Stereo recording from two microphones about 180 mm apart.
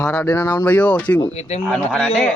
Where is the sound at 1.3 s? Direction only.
35° left (ahead or behind).